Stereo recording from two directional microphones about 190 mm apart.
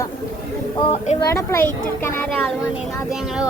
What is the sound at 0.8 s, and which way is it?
Speech, 35° left (ahead or behind).